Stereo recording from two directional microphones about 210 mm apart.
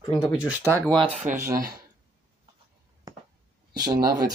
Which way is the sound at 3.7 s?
20° right (ahead or behind).